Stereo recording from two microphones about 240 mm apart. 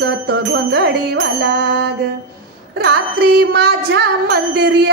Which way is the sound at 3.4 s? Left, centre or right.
Right.